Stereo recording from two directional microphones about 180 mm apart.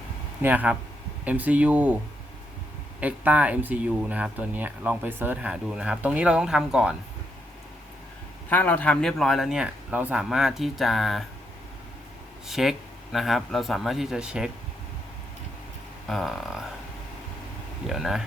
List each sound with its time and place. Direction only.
0.4 s speech: 10° right (ahead or behind)
3.0 s speech: 10° right (ahead or behind)
8.4 s speech: 10° left (ahead or behind)
12.5 s speech: centre (ahead or behind)
16.0 s speech: centre (ahead or behind)
17.8 s speech: centre (ahead or behind)